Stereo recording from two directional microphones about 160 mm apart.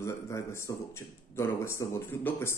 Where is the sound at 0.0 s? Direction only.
15° left (ahead or behind).